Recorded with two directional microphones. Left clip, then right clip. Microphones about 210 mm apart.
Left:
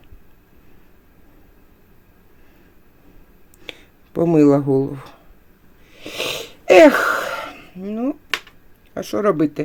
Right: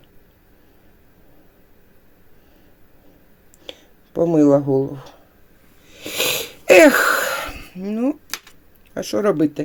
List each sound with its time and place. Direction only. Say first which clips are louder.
3.6 s speech: left 1 dB; 25° left (ahead or behind)
5.9 s wheeze: right 4 dB; 10° right (ahead or behind)
9.0 s speech: even; centre (ahead or behind)